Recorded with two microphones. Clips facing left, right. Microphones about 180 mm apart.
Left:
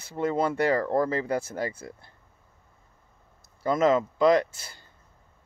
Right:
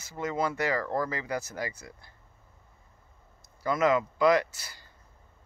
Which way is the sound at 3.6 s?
25° left (ahead or behind).